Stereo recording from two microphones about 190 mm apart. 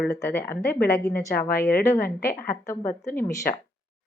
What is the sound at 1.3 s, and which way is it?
Speech, 50° left (ahead or behind).